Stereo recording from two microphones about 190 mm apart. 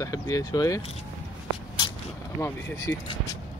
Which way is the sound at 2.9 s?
10° left (ahead or behind).